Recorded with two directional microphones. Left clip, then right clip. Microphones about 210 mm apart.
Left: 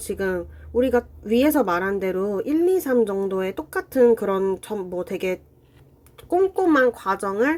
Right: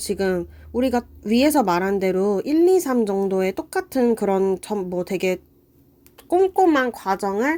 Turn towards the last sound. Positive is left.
turn(degrees=-30)  # may be behind; listen again after turning